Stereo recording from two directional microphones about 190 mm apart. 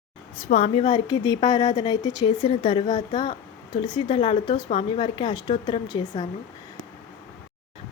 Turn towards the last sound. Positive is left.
turn(degrees=20)  # may be behind; listen again after turning